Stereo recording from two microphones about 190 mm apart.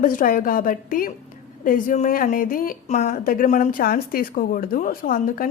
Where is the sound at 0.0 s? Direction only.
45° left (ahead or behind).